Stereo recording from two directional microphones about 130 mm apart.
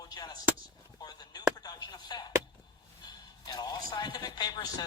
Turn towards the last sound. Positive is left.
turn(degrees=30)  # may be behind; listen again after turning